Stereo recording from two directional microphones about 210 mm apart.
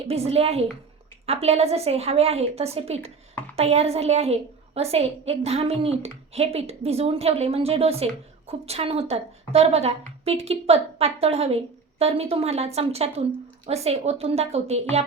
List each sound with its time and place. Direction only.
0.1 s a woman's voice: 30° right (ahead or behind)